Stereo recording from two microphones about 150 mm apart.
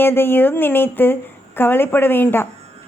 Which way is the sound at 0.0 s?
15° left (ahead or behind).